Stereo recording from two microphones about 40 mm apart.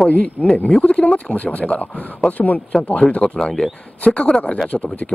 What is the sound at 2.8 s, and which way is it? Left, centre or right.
Speech, left.